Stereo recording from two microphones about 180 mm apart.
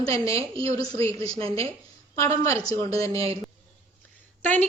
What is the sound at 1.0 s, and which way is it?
Speech, 35° right (ahead or behind).